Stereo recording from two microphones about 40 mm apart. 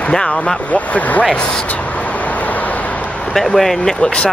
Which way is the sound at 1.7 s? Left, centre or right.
Left.